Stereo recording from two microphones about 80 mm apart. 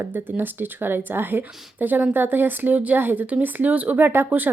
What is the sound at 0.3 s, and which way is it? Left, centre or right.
A woman's voice, right.